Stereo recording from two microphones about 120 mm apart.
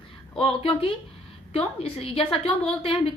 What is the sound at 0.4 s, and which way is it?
A woman's voice, 50° left (ahead or behind).